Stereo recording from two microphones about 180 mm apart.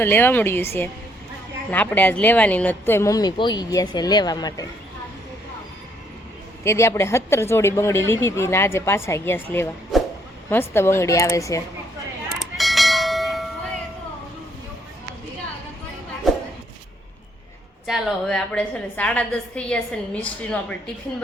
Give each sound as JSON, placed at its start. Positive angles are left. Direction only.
{"t": 0.0, "sound": "speech", "side_deg": 10}
{"t": 6.7, "sound": "speech", "side_deg": 15}
{"t": 9.9, "sound": "a sound", "side_deg": 0}
{"t": 10.5, "sound": "speech", "side_deg": 15}
{"t": 12.3, "sound": "bell", "side_deg": 0}
{"t": 16.3, "sound": "a sound", "side_deg": 0}
{"t": 17.8, "sound": "a woman's voice", "side_deg": 0}